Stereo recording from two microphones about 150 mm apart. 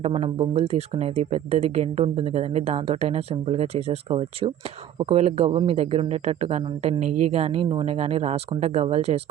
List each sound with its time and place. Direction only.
0.0 s speech: 40° right (ahead or behind)